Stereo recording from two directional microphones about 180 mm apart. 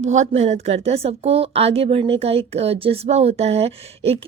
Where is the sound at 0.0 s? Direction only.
40° right (ahead or behind).